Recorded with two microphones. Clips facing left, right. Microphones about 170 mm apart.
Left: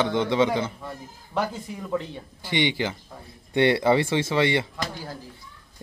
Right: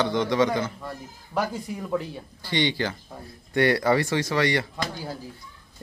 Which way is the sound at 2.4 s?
15° left (ahead or behind).